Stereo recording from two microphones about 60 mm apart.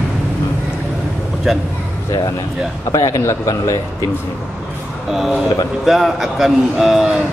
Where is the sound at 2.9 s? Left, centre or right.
Left.